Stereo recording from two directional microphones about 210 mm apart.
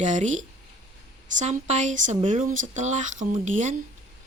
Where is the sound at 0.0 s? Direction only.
35° right (ahead or behind).